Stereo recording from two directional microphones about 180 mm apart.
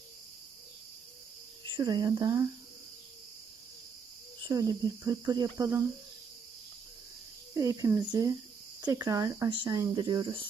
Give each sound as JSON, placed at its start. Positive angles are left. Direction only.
{"t": 1.7, "sound": "speech", "side_deg": -25}
{"t": 4.4, "sound": "speech", "side_deg": -20}
{"t": 7.5, "sound": "speech", "side_deg": -20}